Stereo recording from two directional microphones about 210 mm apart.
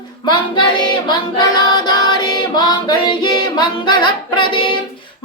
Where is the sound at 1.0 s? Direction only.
20° left (ahead or behind).